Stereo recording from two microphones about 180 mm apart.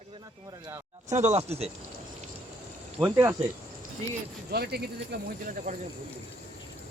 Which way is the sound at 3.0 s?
10° right (ahead or behind).